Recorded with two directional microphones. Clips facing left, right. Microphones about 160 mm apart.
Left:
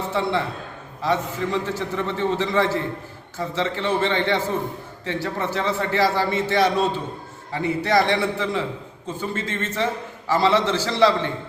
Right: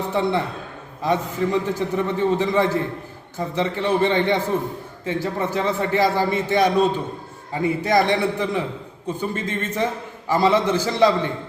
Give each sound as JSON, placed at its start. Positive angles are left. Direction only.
{"t": 0.1, "sound": "a man's voice", "side_deg": -15}